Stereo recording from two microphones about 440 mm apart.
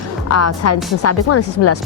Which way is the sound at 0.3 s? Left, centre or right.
Left.